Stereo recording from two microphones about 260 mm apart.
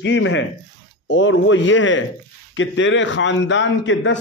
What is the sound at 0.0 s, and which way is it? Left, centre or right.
A man's voice, left.